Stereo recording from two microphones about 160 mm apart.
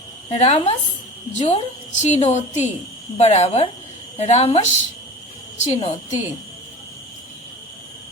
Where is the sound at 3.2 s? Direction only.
40° left (ahead or behind).